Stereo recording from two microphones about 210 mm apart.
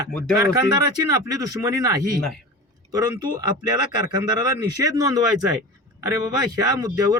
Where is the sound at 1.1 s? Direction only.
15° right (ahead or behind).